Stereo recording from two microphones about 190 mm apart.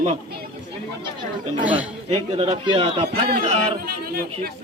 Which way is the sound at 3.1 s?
55° right (ahead or behind).